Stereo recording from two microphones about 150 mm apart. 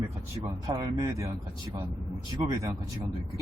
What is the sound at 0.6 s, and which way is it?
Speech, 25° right (ahead or behind).